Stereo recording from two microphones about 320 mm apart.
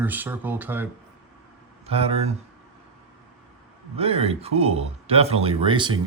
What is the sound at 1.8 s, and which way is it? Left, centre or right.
Speech, centre.